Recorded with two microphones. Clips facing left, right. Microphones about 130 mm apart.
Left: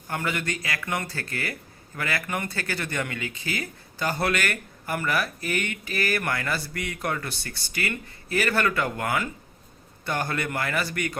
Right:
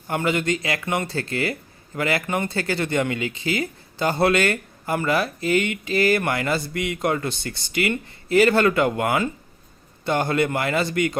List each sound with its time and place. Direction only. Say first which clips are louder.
0.1 s speech: right 7 dB; 25° right (ahead or behind)